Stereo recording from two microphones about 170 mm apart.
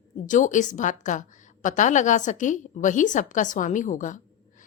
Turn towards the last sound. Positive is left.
turn(degrees=50)  # may be behind; listen again after turning